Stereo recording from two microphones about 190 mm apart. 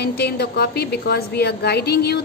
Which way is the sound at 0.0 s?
60° left (ahead or behind).